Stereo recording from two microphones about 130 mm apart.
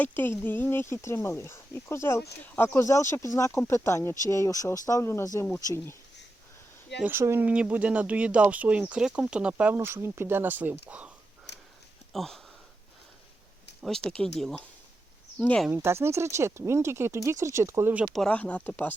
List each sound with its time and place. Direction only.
0.0 s speech: 15° left (ahead or behind)
7.0 s speech: 20° right (ahead or behind)
12.1 s speech: centre (ahead or behind)
13.8 s speech: centre (ahead or behind)
15.7 s speech: 20° right (ahead or behind)
18.1 s speech: 5° left (ahead or behind)